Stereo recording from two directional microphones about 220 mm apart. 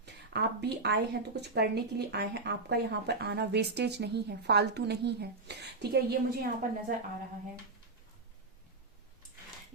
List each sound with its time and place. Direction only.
0.0 s speech: 50° right (ahead or behind)